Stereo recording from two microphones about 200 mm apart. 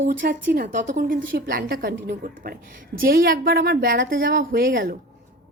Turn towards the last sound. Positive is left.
turn(degrees=-50)  # may be behind; listen again after turning